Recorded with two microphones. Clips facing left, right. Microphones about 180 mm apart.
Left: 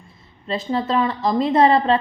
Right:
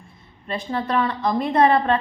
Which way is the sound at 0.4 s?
25° left (ahead or behind).